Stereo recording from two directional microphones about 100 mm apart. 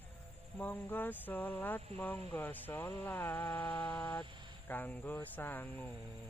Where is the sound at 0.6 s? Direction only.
20° left (ahead or behind).